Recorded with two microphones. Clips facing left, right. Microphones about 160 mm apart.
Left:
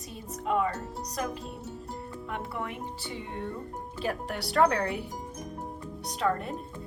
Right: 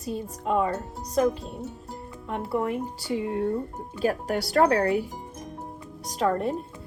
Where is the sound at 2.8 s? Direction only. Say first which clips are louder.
Right 9 dB; centre (ahead or behind).